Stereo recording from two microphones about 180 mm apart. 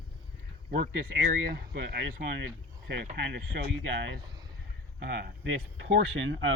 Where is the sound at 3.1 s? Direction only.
65° right (ahead or behind).